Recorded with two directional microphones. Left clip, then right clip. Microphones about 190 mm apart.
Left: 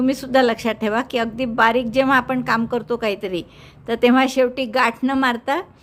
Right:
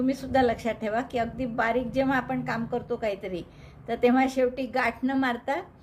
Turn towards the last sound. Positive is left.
turn(degrees=35)  # may be behind; listen again after turning